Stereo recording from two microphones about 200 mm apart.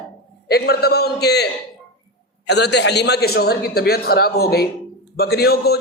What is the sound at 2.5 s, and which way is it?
A man's voice, 55° left (ahead or behind).